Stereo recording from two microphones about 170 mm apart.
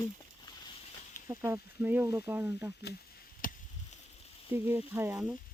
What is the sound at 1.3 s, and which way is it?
Speech, 15° right (ahead or behind).